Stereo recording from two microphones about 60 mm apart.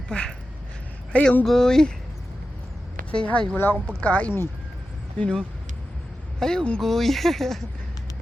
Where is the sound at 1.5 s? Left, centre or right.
Centre.